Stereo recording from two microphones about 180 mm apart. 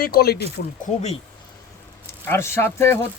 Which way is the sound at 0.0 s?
60° left (ahead or behind).